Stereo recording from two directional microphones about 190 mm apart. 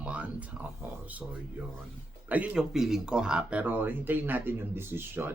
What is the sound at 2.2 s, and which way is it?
Speech, 10° right (ahead or behind).